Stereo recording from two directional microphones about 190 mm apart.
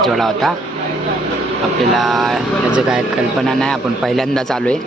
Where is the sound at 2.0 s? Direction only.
Centre (ahead or behind).